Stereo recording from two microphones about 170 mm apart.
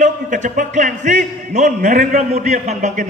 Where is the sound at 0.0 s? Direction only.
45° right (ahead or behind).